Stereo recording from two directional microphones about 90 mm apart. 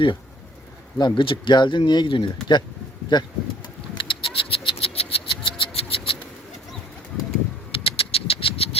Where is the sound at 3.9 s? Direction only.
65° left (ahead or behind); by 6.2 s 85° left.